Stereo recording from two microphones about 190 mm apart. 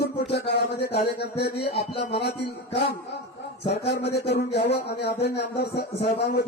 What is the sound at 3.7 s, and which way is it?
Speech, 60° left (ahead or behind).